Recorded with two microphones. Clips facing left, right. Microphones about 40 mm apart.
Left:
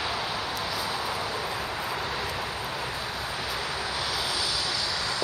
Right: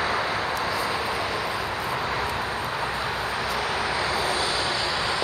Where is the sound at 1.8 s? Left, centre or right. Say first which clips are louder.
Right 4 dB; right.